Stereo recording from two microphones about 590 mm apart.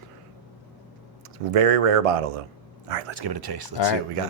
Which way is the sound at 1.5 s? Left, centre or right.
Right.